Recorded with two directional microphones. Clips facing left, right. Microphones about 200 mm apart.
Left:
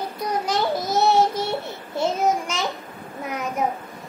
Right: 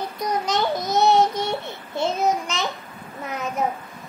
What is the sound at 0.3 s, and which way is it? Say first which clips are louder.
Child singing: even; 5° left (ahead or behind).